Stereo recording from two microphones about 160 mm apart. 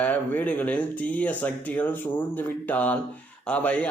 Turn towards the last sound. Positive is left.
turn(degrees=10)  # may be behind; listen again after turning